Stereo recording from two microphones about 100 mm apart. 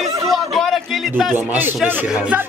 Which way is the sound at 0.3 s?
Centre (ahead or behind).